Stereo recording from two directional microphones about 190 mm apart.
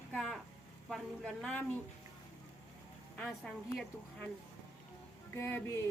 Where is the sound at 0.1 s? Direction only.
Centre (ahead or behind).